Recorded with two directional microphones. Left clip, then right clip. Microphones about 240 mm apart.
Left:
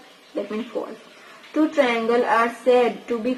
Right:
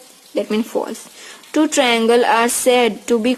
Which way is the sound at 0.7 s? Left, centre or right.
Right.